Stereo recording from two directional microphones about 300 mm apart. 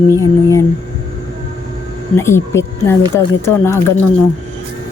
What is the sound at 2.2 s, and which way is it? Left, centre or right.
Speech, centre.